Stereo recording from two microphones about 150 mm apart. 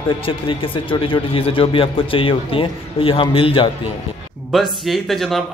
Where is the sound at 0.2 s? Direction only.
35° left (ahead or behind).